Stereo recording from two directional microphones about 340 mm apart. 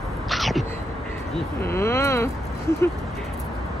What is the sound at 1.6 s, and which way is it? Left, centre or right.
Speech, centre.